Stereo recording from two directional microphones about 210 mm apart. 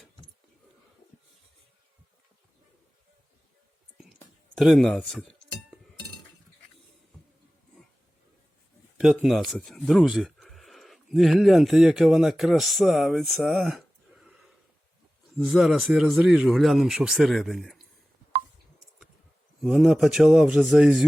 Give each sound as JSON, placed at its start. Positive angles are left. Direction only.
{"t": 4.5, "sound": "speech", "side_deg": 0}
{"t": 9.1, "sound": "speech", "side_deg": 0}
{"t": 19.6, "sound": "speech", "side_deg": 0}